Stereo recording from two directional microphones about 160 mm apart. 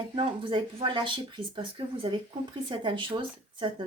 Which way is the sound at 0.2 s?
30° right (ahead or behind).